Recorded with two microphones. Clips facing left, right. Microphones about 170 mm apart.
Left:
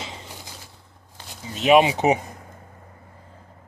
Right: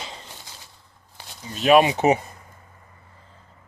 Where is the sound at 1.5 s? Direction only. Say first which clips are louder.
Even; 20° left (ahead or behind).